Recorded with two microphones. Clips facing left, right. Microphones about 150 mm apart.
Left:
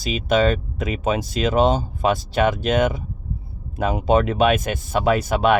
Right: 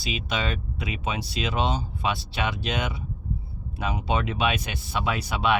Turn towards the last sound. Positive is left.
turn(degrees=45)  # may be behind; listen again after turning